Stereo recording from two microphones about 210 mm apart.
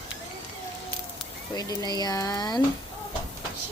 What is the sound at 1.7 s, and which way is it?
Speech, 20° left (ahead or behind).